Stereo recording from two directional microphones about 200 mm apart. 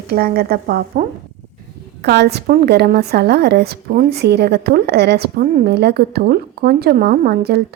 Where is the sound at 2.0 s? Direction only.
55° right (ahead or behind).